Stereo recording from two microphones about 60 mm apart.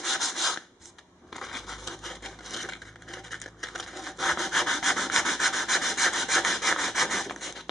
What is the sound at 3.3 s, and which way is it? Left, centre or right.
Rub, centre.